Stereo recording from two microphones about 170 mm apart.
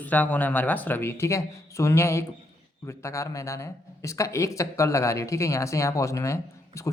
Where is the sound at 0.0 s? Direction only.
10° left (ahead or behind).